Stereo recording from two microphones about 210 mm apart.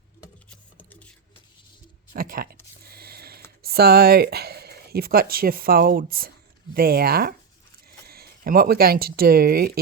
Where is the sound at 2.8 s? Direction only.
45° right (ahead or behind).